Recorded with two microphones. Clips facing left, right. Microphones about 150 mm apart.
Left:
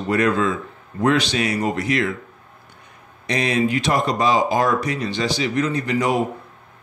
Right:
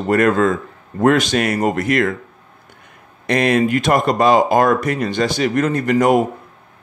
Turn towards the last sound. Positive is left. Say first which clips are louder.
# right 6 dB
turn(degrees=-50)  # may be behind; listen again after turning